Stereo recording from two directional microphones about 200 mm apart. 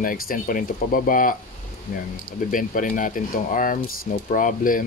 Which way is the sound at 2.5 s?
40° left (ahead or behind).